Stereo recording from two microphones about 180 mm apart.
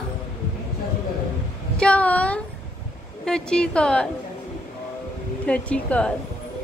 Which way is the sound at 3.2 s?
5° left (ahead or behind).